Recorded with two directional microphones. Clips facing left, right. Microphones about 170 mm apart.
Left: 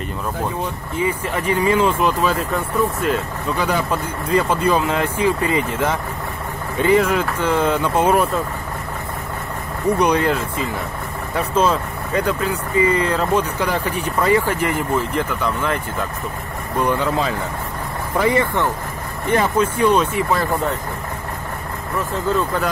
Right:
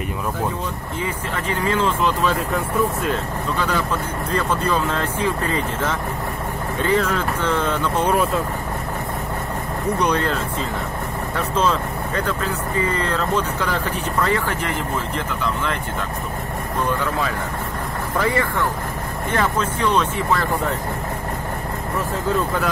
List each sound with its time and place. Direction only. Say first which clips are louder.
0.9 s speech: left 6 dB; 15° left (ahead or behind)
3.5 s speech: left 3 dB; 15° left (ahead or behind)
9.9 s speech: left 3 dB; 10° left (ahead or behind)
18.2 s speech: left 4 dB; 20° left (ahead or behind)